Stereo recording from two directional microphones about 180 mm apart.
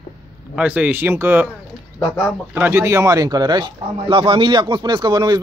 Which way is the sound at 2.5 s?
10° right (ahead or behind).